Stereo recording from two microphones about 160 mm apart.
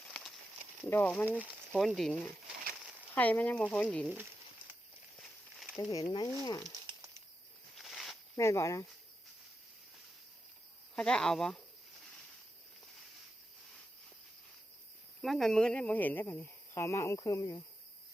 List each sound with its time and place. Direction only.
0.1 s a sound: centre (ahead or behind)
0.9 s speech: 10° left (ahead or behind)
3.2 s speech: 10° left (ahead or behind)
4.0 s speech: 10° right (ahead or behind)
5.7 s speech: 20° left (ahead or behind)
7.8 s a sound: centre (ahead or behind)
8.4 s speech: 20° left (ahead or behind)
10.9 s speech: 5° left (ahead or behind)
15.2 s speech: centre (ahead or behind); by 17.6 s 20° left (ahead or behind)